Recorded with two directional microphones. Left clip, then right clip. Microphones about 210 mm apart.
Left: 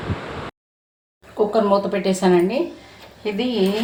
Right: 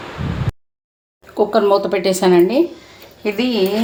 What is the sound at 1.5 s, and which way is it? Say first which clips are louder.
Speech: right 4 dB; 55° right (ahead or behind).